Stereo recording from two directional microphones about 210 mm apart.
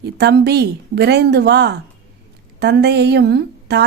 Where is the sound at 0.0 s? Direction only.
50° right (ahead or behind).